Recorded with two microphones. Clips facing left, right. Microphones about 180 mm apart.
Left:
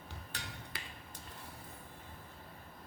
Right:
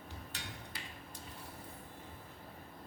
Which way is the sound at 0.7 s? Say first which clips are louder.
Even; 70° left (ahead or behind).